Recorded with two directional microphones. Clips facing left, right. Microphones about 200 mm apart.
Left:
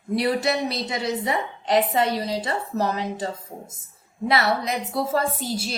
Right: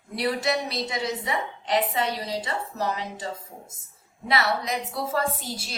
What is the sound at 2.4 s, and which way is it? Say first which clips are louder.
A woman's voice: left 4 dB; 45° left (ahead or behind).